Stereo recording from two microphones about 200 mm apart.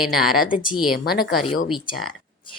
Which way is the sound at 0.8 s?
Centre (ahead or behind).